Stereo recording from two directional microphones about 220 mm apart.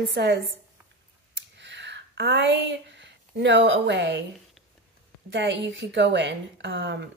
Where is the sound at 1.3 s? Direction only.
55° right (ahead or behind).